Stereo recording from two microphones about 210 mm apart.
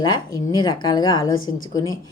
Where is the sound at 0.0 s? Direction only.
20° left (ahead or behind).